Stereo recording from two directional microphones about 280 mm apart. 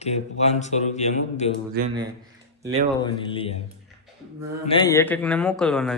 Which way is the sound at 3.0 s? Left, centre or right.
Centre.